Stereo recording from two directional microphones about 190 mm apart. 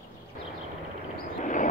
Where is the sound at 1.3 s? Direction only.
40° left (ahead or behind).